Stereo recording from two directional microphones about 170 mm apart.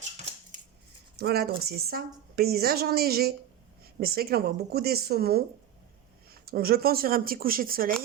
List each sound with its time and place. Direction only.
1.1 s a woman's voice: 65° right (ahead or behind)
6.4 s a woman's voice: 65° right (ahead or behind)